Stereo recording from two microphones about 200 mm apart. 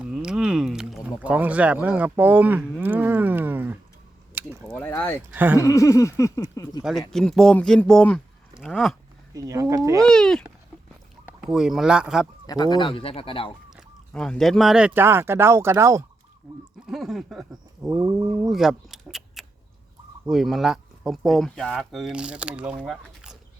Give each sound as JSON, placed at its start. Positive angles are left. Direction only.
{"t": 0.0, "sound": "speech", "side_deg": -5}
{"t": 4.4, "sound": "a sound", "side_deg": -10}
{"t": 4.7, "sound": "speech", "side_deg": 10}
{"t": 5.3, "sound": "speech", "side_deg": -10}
{"t": 5.5, "sound": "speech", "side_deg": 15}
{"t": 7.1, "sound": "speech", "side_deg": 0}
{"t": 9.3, "sound": "speech", "side_deg": -15}
{"t": 10.0, "sound": "speech", "side_deg": 5}
{"t": 11.4, "sound": "speech", "side_deg": 0}
{"t": 12.5, "sound": "speech", "side_deg": 20}
{"t": 13.7, "sound": "speech", "side_deg": 0}
{"t": 16.8, "sound": "speech", "side_deg": 0}